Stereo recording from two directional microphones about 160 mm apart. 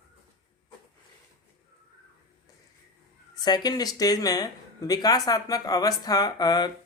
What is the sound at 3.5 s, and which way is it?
Speech, 25° left (ahead or behind).